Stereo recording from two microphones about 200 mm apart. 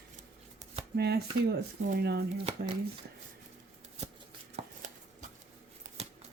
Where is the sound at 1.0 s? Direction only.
55° right (ahead or behind).